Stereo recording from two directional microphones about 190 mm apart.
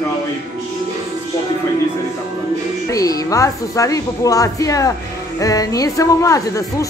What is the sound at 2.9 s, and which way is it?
A woman's voice, 20° left (ahead or behind).